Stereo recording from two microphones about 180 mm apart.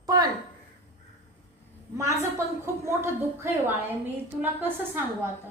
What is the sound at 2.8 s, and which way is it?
Speech, 15° right (ahead or behind).